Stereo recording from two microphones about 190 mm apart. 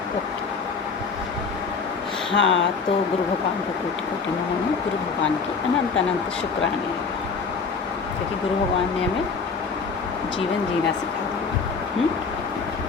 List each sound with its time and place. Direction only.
2.3 s speech: 75° left (ahead or behind)